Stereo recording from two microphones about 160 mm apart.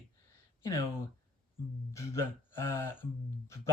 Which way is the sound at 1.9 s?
15° left (ahead or behind).